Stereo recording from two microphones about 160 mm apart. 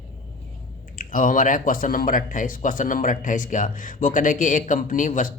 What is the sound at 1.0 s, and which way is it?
Speech, 60° left (ahead or behind).